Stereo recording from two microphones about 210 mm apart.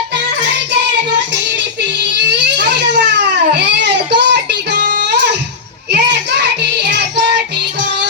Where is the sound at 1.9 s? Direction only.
55° right (ahead or behind).